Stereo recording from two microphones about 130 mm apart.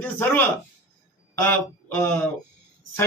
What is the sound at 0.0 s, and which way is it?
Speech, 15° left (ahead or behind).